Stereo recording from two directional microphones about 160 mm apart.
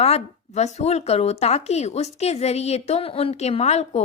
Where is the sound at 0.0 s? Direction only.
40° left (ahead or behind).